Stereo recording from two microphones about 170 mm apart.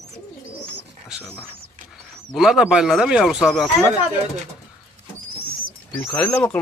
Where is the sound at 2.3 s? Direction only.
Centre (ahead or behind).